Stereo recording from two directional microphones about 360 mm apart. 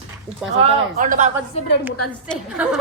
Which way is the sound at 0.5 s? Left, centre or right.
Centre.